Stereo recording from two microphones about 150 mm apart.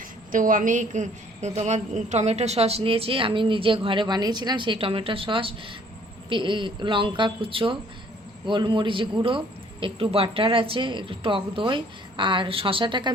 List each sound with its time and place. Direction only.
0.3 s a woman's voice: 60° right (ahead or behind); by 13.1 s 30° right (ahead or behind)